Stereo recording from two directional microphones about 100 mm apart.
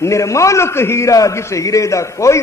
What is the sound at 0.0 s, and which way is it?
A man's voice, 30° left (ahead or behind).